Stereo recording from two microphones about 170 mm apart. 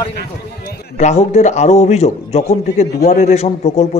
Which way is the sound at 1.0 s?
40° left (ahead or behind).